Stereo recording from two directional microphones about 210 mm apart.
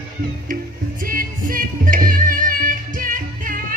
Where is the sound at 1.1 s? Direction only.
40° right (ahead or behind).